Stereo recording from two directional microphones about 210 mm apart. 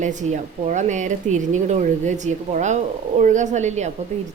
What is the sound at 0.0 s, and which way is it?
A woman's voice, 35° right (ahead or behind).